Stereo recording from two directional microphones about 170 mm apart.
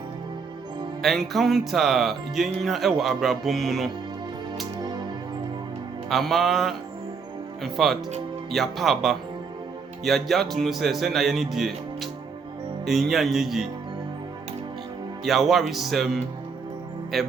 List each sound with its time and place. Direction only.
1.0 s speech: centre (ahead or behind)
6.1 s speech: centre (ahead or behind)
15.2 s speech: centre (ahead or behind)